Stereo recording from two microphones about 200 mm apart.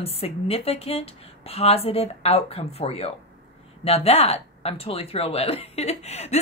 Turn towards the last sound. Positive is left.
turn(degrees=30)  # may be behind; listen again after turning